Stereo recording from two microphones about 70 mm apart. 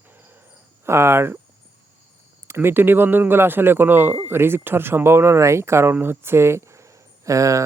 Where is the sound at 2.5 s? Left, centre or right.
Right.